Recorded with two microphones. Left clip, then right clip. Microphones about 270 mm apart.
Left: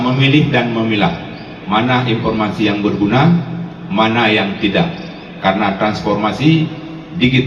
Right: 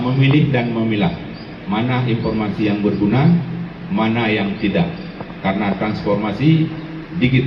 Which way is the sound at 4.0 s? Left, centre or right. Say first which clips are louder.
Left 6 dB; left.